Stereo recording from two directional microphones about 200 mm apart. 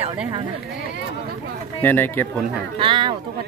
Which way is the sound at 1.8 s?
10° left (ahead or behind).